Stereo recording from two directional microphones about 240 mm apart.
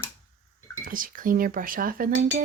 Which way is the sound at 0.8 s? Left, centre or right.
Right.